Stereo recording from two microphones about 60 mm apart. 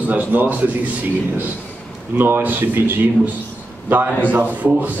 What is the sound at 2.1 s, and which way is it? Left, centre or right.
A man's voice, right.